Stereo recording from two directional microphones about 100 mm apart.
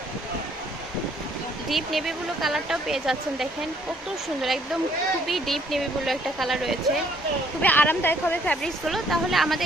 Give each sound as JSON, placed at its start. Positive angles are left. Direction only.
{"t": 1.7, "sound": "speech", "side_deg": 0}
{"t": 4.4, "sound": "speech", "side_deg": 0}
{"t": 7.6, "sound": "a woman's voice", "side_deg": 15}
{"t": 8.6, "sound": "speech", "side_deg": 0}